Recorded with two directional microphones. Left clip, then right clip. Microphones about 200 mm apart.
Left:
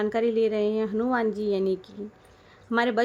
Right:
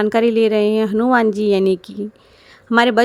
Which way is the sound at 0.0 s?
30° right (ahead or behind).